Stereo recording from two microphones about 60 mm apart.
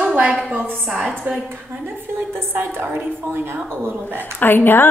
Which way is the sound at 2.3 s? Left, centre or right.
Right.